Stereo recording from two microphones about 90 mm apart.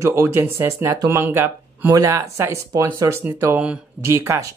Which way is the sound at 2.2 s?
25° right (ahead or behind).